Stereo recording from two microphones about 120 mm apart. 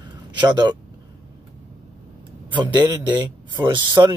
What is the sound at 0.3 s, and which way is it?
Speech, 40° right (ahead or behind).